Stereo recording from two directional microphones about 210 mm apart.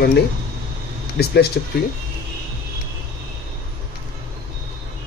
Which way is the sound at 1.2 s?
50° left (ahead or behind).